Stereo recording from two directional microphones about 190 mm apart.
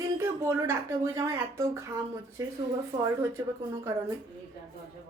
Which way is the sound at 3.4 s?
20° right (ahead or behind).